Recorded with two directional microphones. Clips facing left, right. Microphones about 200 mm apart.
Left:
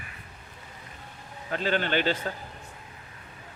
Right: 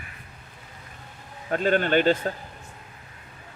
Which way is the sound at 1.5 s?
45° right (ahead or behind).